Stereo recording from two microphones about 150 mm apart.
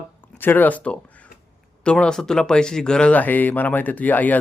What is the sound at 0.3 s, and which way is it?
A man's voice, 10° left (ahead or behind).